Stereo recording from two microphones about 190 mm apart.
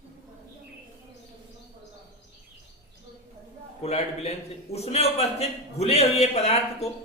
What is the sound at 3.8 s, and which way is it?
A man's voice, 35° left (ahead or behind).